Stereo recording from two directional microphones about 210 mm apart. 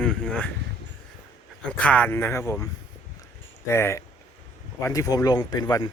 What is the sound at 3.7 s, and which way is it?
Speech, 10° left (ahead or behind).